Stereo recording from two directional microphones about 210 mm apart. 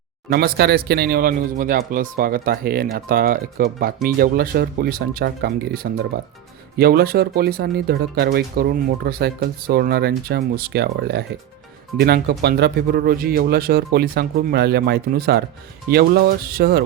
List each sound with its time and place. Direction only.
0.3 s speech: 45° right (ahead or behind)